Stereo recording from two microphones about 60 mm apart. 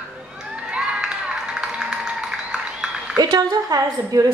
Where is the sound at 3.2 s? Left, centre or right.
Right.